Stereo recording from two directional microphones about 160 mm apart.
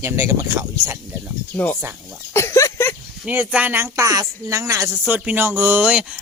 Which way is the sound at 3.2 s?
10° right (ahead or behind).